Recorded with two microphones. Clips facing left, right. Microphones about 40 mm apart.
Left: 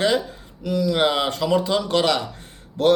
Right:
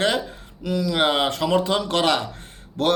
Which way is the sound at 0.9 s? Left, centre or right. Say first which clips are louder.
Even; right.